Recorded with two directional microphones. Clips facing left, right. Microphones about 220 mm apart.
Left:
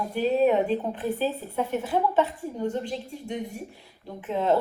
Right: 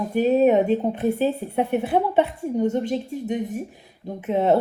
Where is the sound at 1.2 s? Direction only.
60° right (ahead or behind).